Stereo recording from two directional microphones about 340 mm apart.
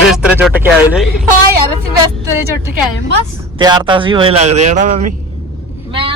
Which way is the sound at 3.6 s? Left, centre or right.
Centre.